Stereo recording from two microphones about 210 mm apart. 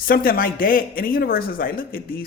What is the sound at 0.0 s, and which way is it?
Speech, 45° left (ahead or behind).